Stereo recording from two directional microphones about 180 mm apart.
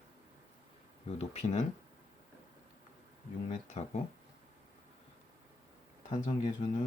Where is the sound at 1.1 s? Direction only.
35° left (ahead or behind).